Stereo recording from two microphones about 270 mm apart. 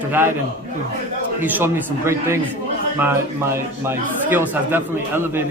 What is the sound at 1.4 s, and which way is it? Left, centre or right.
Speech, centre.